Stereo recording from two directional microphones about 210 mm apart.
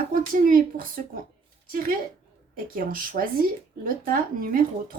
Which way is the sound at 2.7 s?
40° right (ahead or behind).